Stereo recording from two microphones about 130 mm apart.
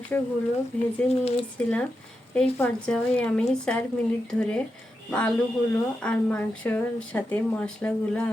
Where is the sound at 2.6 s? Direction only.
10° left (ahead or behind).